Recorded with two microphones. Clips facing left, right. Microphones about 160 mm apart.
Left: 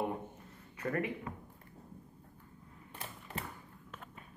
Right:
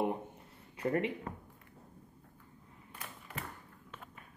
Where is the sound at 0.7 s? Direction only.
25° right (ahead or behind).